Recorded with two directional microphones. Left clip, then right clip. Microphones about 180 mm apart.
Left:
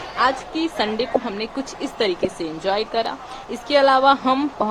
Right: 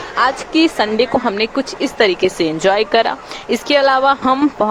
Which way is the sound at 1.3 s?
25° right (ahead or behind).